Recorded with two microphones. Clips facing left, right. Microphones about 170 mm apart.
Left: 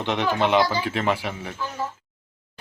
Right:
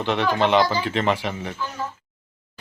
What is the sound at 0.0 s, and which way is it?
Speech, 15° left (ahead or behind).